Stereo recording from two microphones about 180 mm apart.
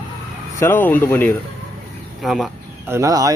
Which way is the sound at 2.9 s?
20° right (ahead or behind).